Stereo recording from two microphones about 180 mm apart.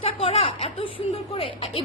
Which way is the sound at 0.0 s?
35° left (ahead or behind).